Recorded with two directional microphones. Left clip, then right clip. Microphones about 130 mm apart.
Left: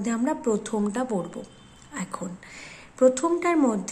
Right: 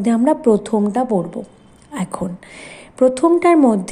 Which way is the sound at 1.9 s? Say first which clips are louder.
Right 9 dB; 35° right (ahead or behind).